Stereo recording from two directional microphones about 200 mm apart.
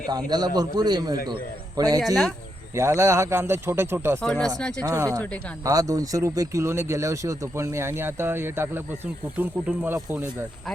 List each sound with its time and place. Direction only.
0.1 s a man's voice: 20° right (ahead or behind)
4.2 s speech: 5° left (ahead or behind)
4.8 s speech: 15° right (ahead or behind)